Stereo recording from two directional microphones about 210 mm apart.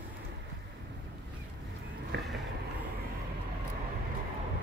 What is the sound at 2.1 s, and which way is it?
Vehicle, 55° right (ahead or behind).